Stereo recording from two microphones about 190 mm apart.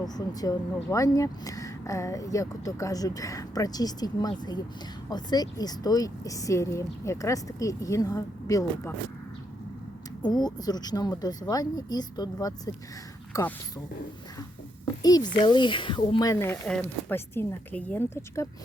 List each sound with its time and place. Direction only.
0.0 s speech: 20° left (ahead or behind)
10.2 s speech: 20° left (ahead or behind)
15.0 s speech: 20° left (ahead or behind)